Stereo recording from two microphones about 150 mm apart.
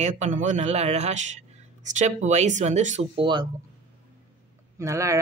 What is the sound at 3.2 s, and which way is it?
Speech, 30° right (ahead or behind).